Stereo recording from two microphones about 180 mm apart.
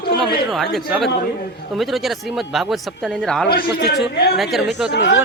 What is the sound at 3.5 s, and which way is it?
Speech, 60° left (ahead or behind).